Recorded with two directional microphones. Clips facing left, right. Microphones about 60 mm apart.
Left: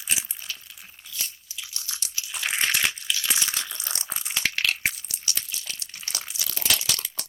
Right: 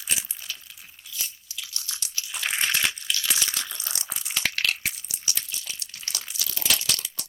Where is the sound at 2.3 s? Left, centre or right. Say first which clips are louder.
Left 1 dB; centre.